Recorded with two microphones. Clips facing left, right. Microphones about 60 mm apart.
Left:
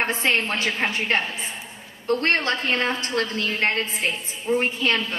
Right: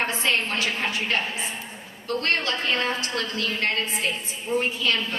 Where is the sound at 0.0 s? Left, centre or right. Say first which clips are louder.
Left 2 dB; left.